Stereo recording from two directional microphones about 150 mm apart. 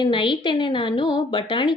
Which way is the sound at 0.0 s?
35° left (ahead or behind).